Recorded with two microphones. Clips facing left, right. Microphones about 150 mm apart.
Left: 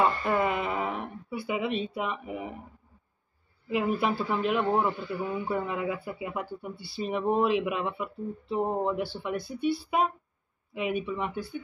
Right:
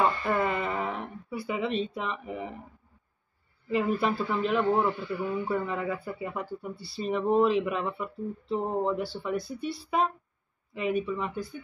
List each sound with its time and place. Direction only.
0.3 s a sound: 15° left (ahead or behind)
3.6 s speech: 10° left (ahead or behind)
6.3 s speech: centre (ahead or behind)
11.1 s speech: 5° left (ahead or behind)